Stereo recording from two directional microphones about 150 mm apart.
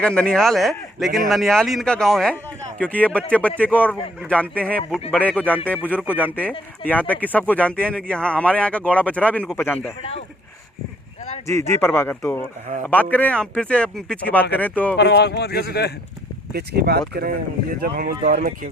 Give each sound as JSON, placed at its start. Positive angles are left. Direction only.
{"t": 0.0, "sound": "a man's voice", "side_deg": 5}
{"t": 10.0, "sound": "speech", "side_deg": 40}
{"t": 11.4, "sound": "a man's voice", "side_deg": 20}
{"t": 14.9, "sound": "speech", "side_deg": 90}
{"t": 16.5, "sound": "speech", "side_deg": -90}